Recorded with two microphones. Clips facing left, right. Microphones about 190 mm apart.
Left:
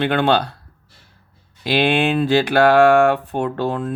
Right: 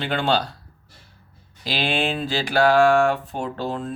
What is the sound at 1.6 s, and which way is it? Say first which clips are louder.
Speech: left 7 dB; 60° left (ahead or behind).